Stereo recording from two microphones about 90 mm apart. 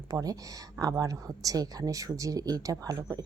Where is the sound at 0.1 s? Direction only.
45° right (ahead or behind).